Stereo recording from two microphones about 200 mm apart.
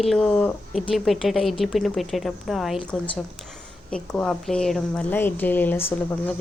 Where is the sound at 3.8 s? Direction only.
5° left (ahead or behind).